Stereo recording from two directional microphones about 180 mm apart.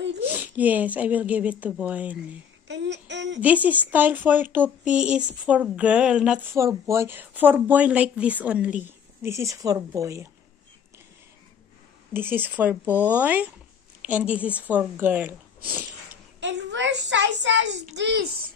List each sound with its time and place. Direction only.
0.3 s speech: 10° right (ahead or behind)
2.7 s a child's voice: 80° right
3.3 s speech: 10° right (ahead or behind)
12.1 s speech: 10° right (ahead or behind)
16.3 s a child's voice: 85° right
17.9 s a child's voice: 70° right (ahead or behind)